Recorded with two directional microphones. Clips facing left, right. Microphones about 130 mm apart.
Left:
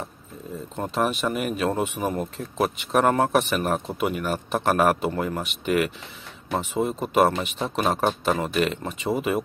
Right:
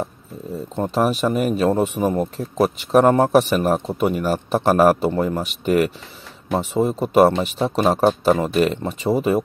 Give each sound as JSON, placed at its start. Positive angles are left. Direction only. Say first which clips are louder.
{"t": 0.7, "sound": "speech", "louder": "right 5 dB", "side_deg": -35}